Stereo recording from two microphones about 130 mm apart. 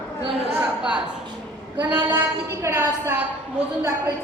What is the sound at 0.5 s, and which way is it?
A woman's voice, 5° right (ahead or behind).